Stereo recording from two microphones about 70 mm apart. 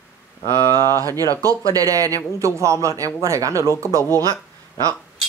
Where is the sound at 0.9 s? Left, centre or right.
Right.